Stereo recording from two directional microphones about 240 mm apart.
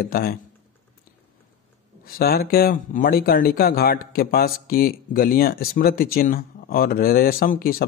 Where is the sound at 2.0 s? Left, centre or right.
Left.